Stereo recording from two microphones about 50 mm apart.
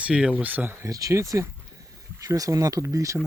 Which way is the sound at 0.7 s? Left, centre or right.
Right.